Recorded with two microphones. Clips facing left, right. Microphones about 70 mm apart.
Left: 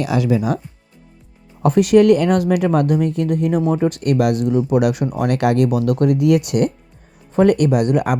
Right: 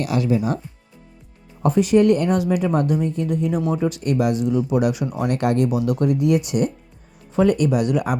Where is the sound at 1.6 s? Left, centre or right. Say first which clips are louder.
Left 4 dB; left.